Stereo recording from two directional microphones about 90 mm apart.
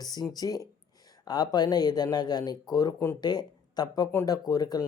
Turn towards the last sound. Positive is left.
turn(degrees=45)  # may be behind; listen again after turning